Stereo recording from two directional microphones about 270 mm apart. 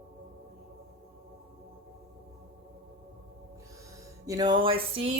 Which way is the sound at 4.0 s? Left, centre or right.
Centre.